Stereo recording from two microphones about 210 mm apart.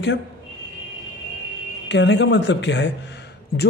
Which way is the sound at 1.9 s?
60° left (ahead or behind).